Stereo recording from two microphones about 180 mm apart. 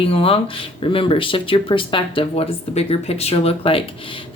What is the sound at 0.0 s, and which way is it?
Speech, 30° left (ahead or behind).